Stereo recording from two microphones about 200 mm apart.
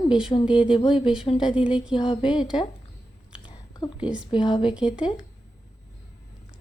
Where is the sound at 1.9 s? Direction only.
25° left (ahead or behind).